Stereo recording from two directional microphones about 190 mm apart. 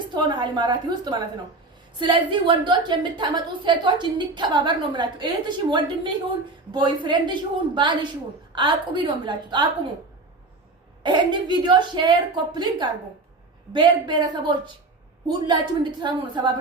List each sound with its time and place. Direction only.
0.1 s a woman's voice: 25° right (ahead or behind)
11.0 s a woman's voice: 25° right (ahead or behind)